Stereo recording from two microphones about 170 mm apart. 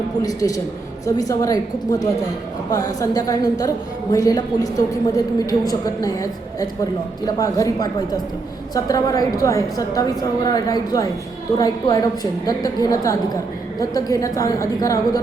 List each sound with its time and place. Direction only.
0.2 s a woman's voice: 20° left (ahead or behind)